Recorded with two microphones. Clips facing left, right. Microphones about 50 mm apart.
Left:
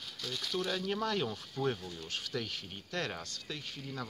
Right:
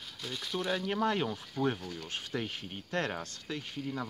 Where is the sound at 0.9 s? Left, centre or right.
Right.